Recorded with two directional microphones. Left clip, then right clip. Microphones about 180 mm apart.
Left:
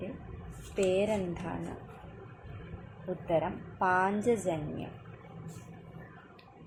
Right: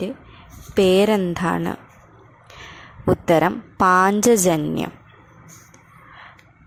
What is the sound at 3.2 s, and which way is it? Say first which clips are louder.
A woman's voice: right 12 dB; 60° right (ahead or behind).